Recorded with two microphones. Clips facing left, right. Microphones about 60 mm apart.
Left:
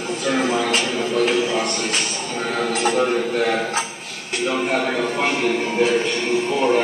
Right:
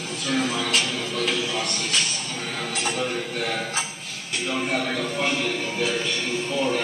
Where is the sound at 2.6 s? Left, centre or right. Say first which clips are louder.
Left 8 dB; left.